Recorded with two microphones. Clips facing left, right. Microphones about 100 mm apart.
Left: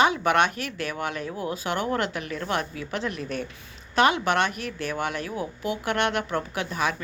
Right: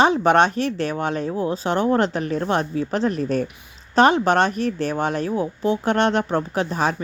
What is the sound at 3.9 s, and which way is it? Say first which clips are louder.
A woman's voice: right 6 dB; 35° right (ahead or behind).